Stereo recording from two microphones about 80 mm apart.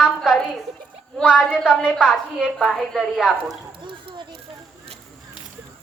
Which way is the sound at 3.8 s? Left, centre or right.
Right.